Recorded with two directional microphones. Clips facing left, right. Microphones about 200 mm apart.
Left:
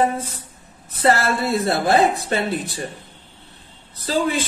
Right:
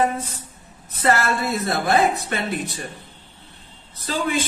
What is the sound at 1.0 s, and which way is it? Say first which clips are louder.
A woman's voice: left 2 dB; 30° left (ahead or behind).